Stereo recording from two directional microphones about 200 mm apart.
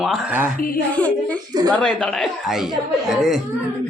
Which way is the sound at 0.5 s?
45° left (ahead or behind).